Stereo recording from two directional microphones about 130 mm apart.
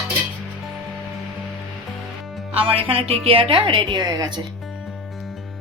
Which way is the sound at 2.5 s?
45° right (ahead or behind).